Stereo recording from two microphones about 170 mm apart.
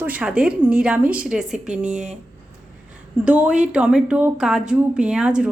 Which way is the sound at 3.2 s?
5° right (ahead or behind).